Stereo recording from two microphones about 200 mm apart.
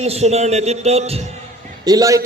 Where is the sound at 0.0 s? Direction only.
35° right (ahead or behind).